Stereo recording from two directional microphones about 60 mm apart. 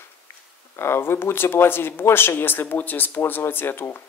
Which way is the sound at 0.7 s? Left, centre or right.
Left.